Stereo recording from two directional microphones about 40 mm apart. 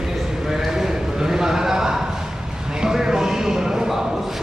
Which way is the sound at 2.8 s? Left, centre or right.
Centre.